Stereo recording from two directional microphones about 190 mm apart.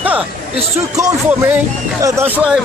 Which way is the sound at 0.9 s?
15° right (ahead or behind).